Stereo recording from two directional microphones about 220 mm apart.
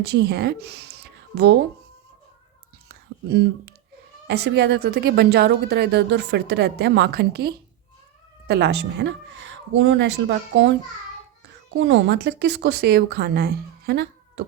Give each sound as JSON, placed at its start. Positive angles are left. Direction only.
{"t": 0.0, "sound": "a woman's voice", "side_deg": -50}
{"t": 2.9, "sound": "a sound", "side_deg": -50}
{"t": 4.3, "sound": "a woman's voice", "side_deg": -50}
{"t": 11.8, "sound": "a woman's voice", "side_deg": -55}